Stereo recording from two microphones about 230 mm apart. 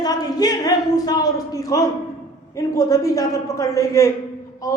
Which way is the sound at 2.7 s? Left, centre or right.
Centre.